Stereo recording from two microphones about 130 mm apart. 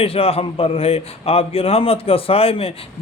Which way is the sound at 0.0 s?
45° left (ahead or behind).